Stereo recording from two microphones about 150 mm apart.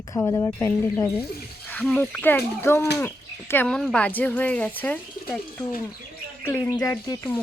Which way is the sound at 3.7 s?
5° left (ahead or behind).